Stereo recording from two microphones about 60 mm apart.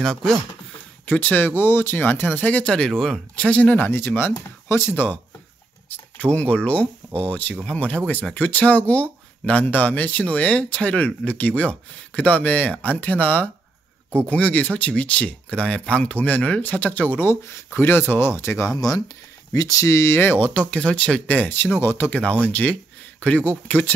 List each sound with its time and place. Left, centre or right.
0.0 s speech: centre
1.0 s speech: left
2.6 s speech: centre
3.4 s speech: left
3.9 s speech: left
4.9 s speech: left
18.8 s speech: left
19.5 s speech: left; by 21.5 s centre
21.5 s speech: left
22.1 s speech: left